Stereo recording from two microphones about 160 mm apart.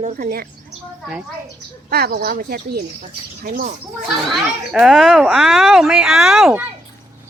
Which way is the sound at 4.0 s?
Centre (ahead or behind).